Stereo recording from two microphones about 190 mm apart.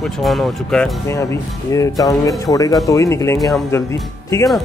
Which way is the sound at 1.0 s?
15° left (ahead or behind).